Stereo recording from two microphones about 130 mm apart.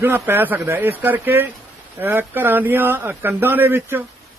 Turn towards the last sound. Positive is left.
turn(degrees=-15)  # may be behind; listen again after turning